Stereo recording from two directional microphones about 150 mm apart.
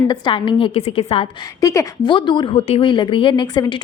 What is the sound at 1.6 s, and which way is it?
Speech, 20° left (ahead or behind).